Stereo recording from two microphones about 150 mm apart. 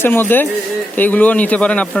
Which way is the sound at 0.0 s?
15° left (ahead or behind).